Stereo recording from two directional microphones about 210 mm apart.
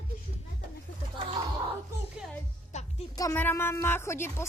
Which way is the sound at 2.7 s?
35° left (ahead or behind).